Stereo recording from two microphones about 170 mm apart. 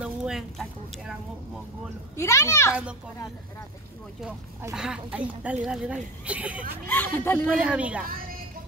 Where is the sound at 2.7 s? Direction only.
5° right (ahead or behind).